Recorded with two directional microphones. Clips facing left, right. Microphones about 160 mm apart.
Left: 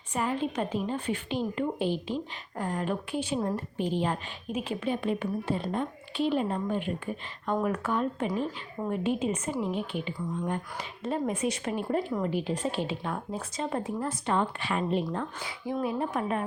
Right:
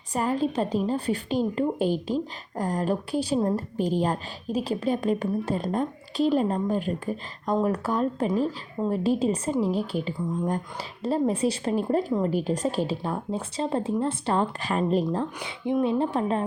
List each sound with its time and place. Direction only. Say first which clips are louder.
0.1 s a woman's voice: right 4 dB; 40° right (ahead or behind)
15.4 s speech: right 6 dB; 20° right (ahead or behind)